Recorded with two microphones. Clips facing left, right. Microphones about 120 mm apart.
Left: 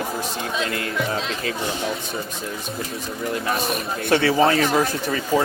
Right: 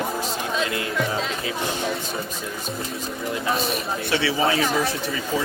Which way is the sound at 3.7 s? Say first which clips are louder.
Left 3 dB; 50° left (ahead or behind).